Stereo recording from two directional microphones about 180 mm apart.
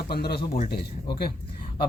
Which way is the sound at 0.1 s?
60° left (ahead or behind).